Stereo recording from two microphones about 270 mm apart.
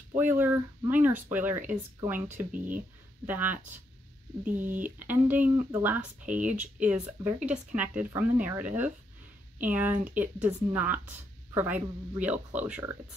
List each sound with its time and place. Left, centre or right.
0.1 s speech: centre
3.3 s speech: centre
4.5 s speech: right
4.8 s speech: centre